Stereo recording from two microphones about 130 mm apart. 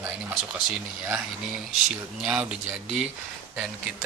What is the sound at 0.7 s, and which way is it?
Speech, 15° right (ahead or behind).